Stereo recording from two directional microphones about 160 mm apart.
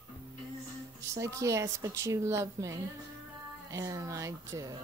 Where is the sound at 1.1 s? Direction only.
20° right (ahead or behind).